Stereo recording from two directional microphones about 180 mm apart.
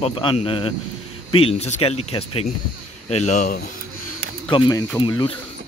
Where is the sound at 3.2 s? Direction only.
50° left (ahead or behind).